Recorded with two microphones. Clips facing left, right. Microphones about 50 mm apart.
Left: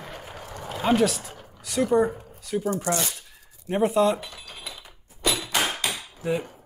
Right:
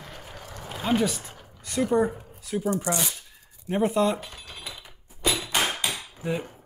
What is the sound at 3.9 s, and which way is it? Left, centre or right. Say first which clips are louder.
Speech: left 3 dB; centre.